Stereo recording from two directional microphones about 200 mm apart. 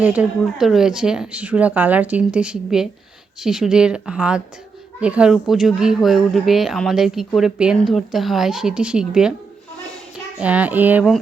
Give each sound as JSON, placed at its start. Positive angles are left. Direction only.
{"t": 0.0, "sound": "a child's voice", "side_deg": -5}